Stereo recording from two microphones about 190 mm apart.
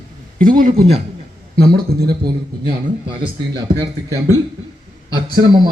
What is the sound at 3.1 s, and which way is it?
Speech, 25° right (ahead or behind).